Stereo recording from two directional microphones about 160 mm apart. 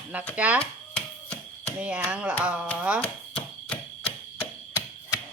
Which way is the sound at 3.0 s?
10° left (ahead or behind).